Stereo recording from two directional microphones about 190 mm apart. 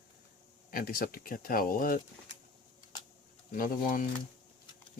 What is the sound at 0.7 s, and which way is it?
Speech, 50° left (ahead or behind).